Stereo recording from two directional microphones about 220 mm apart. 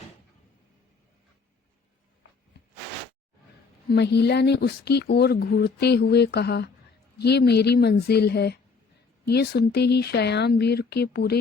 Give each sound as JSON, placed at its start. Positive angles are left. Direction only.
{"t": 3.8, "sound": "speech", "side_deg": 50}